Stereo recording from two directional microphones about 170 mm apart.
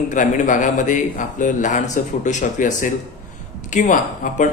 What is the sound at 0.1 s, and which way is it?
Speech, 50° left (ahead or behind).